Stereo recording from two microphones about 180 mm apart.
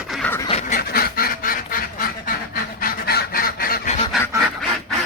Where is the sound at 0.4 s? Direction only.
35° left (ahead or behind).